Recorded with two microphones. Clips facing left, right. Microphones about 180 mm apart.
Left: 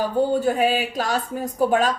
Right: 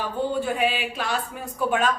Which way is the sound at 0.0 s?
40° left (ahead or behind).